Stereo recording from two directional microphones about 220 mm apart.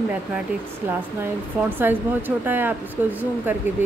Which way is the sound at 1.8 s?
10° right (ahead or behind).